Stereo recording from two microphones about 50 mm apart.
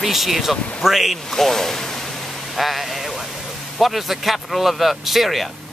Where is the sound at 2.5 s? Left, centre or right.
Centre.